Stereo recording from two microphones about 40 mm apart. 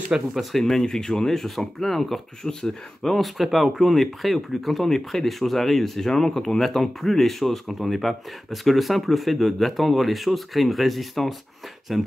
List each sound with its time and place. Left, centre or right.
0.4 s speech: centre
3.2 s speech: centre